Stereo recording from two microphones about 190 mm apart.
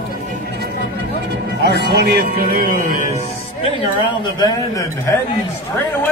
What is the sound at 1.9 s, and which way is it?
Speech, 60° right (ahead or behind).